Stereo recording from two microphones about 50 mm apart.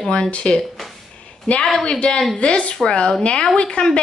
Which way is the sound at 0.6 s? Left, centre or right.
Centre.